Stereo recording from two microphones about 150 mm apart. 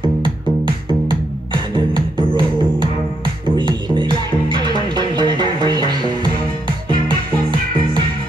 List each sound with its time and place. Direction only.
0.8 s music: 30° right (ahead or behind)
3.4 s music: 30° right (ahead or behind)